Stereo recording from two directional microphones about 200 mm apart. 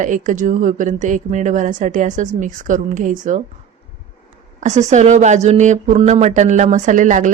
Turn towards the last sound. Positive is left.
turn(degrees=-40)  # may be behind; listen again after turning